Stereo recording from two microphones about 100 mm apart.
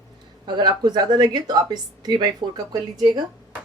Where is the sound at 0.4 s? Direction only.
50° right (ahead or behind).